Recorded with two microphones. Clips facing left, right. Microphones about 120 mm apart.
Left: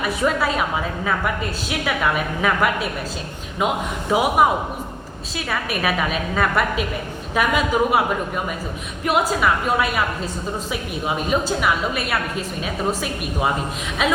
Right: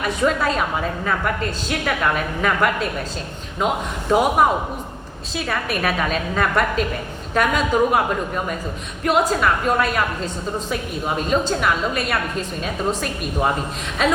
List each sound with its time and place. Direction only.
0.0 s a woman's voice: 5° left (ahead or behind)
4.1 s a woman's voice: 5° left (ahead or behind)
9.0 s a woman's voice: 5° left (ahead or behind)